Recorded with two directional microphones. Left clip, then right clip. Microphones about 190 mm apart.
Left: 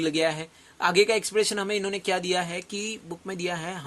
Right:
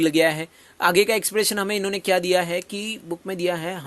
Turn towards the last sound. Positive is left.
turn(degrees=-35)  # may be behind; listen again after turning